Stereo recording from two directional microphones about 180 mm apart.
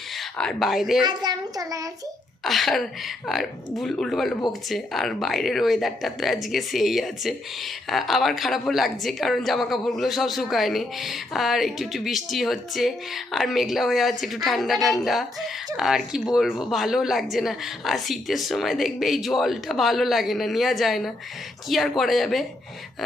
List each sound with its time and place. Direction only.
0.2 s speech: centre (ahead or behind)
1.0 s a child's voice: 25° right (ahead or behind)
2.4 s speech: centre (ahead or behind)